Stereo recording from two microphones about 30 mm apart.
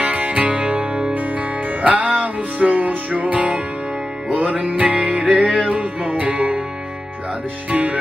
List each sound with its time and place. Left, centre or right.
0.0 s music: right
1.8 s music: right
4.3 s music: right
7.7 s music: right